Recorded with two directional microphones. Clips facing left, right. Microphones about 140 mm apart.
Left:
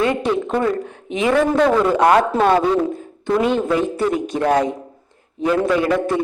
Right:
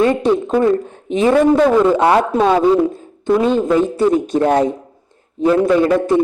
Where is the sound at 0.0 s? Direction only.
30° right (ahead or behind).